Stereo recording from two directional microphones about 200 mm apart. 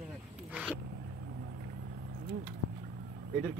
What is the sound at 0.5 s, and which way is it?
Speech, 5° right (ahead or behind).